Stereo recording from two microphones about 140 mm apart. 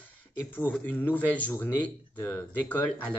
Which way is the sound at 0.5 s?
10° left (ahead or behind).